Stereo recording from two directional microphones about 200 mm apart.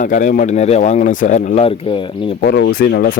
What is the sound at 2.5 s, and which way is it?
Speech, 55° left (ahead or behind).